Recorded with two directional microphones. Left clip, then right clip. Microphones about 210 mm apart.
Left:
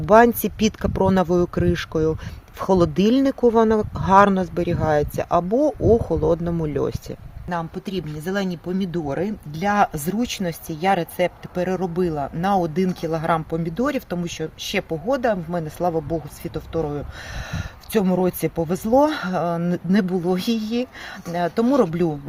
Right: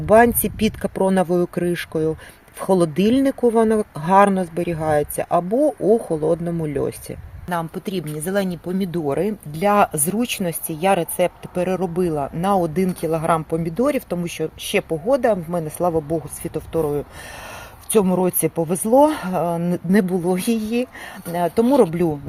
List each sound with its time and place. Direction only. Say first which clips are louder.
0.0 s speech: even; centre (ahead or behind)
7.5 s speech: right 2 dB; 35° right (ahead or behind); by 22.2 s 15° right (ahead or behind)